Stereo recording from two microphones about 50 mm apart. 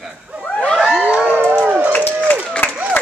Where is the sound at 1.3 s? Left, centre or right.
Right.